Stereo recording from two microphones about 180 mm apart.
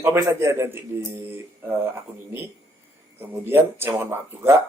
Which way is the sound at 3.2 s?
10° right (ahead or behind).